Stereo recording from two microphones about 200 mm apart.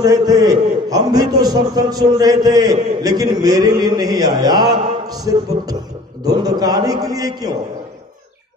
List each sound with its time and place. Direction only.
0.0 s a man's voice: 20° right (ahead or behind)